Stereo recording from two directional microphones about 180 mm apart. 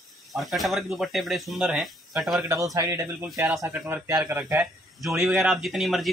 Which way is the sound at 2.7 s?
15° right (ahead or behind).